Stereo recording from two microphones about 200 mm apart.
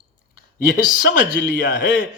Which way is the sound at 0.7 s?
50° left (ahead or behind).